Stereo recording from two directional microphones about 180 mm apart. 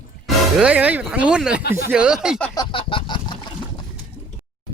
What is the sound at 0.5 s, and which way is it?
Speech, 5° right (ahead or behind).